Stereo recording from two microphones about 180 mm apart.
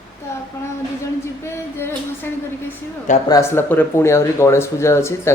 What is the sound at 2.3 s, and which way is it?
A man's voice, 15° left (ahead or behind).